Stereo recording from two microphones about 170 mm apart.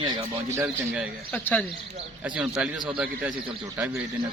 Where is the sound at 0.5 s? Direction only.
10° right (ahead or behind).